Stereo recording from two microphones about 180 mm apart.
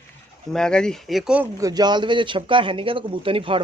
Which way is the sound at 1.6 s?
20° right (ahead or behind).